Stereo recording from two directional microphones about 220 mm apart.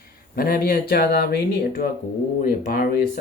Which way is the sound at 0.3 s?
40° left (ahead or behind).